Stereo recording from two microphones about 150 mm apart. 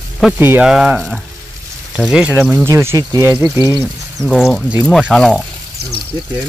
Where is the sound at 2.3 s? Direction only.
15° right (ahead or behind).